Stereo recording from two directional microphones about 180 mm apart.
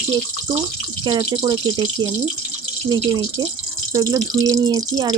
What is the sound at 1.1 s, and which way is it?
Speech, 25° right (ahead or behind).